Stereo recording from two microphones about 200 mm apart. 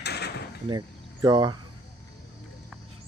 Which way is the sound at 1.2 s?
20° right (ahead or behind).